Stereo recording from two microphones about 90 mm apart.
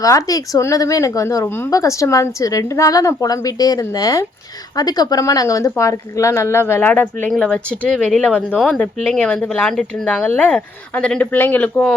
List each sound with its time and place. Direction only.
0.0 s a woman's voice: 40° left (ahead or behind)
1.5 s speech: 25° left (ahead or behind)
1.7 s a woman's voice: 35° left (ahead or behind); by 7.3 s 20° left (ahead or behind)
7.3 s speech: 10° left (ahead or behind)
8.5 s speech: centre (ahead or behind)
8.8 s speech: 10° left (ahead or behind)